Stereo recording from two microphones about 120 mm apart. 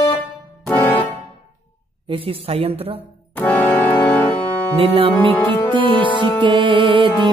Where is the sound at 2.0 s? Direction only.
50° right (ahead or behind).